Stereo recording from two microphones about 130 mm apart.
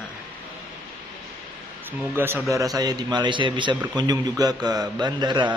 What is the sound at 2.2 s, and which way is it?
A man's voice, 15° right (ahead or behind).